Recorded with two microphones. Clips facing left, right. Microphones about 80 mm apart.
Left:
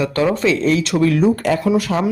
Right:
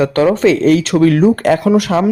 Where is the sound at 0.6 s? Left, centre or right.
Right.